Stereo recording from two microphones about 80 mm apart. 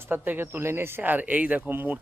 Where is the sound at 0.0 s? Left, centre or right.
Right.